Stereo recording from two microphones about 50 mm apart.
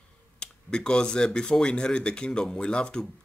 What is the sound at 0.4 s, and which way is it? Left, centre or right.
Speech, centre.